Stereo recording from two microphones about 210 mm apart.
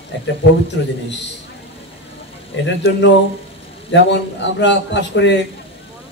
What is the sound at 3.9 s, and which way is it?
Speech, 55° left (ahead or behind).